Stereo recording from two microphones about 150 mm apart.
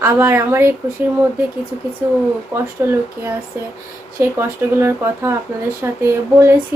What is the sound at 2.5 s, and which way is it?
Speech, 20° right (ahead or behind).